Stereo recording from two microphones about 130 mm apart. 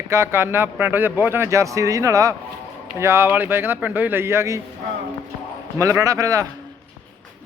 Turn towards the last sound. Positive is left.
turn(degrees=-25)  # may be behind; listen again after turning